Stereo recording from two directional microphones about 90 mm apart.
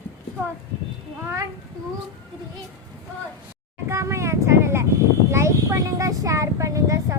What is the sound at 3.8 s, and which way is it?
Vehicle, 30° right (ahead or behind).